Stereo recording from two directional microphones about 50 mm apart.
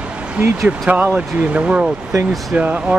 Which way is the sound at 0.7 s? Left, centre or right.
Right.